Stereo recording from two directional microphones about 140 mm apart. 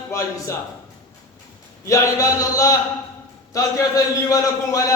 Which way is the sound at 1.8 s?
20° left (ahead or behind).